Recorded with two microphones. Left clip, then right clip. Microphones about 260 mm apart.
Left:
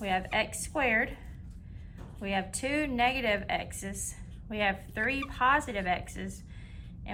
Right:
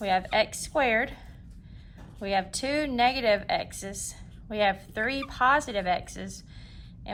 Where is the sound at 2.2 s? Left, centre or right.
Centre.